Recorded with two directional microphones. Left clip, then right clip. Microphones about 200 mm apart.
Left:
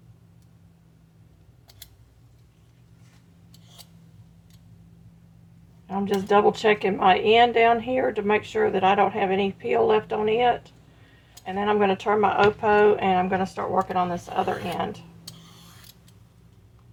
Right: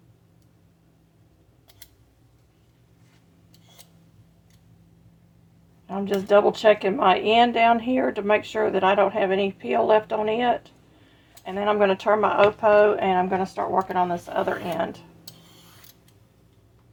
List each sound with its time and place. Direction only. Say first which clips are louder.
5.9 s a woman's voice: right 2 dB; 30° right (ahead or behind)